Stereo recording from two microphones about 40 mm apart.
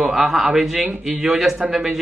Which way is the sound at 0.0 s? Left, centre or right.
Centre.